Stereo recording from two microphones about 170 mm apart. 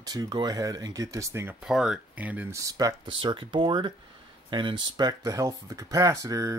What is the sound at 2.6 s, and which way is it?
Speech, 20° right (ahead or behind).